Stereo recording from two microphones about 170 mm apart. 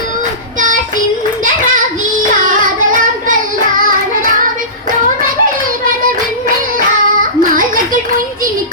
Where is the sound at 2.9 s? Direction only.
50° right (ahead or behind).